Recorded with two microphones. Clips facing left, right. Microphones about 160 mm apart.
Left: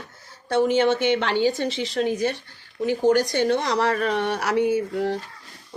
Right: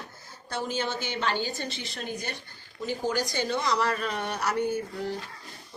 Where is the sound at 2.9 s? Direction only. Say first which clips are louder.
Left 10 dB; 65° left (ahead or behind); by 5.2 s 80° left.